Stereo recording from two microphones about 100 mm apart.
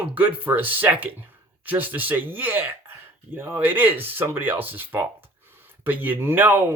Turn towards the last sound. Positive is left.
turn(degrees=-20)  # may be behind; listen again after turning